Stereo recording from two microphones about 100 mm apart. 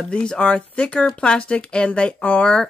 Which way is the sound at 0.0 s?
10° left (ahead or behind).